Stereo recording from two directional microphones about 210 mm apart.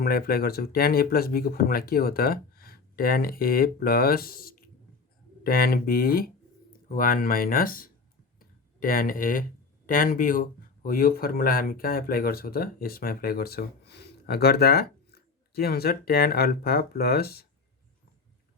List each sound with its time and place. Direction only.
0.0 s speech: 45° left (ahead or behind)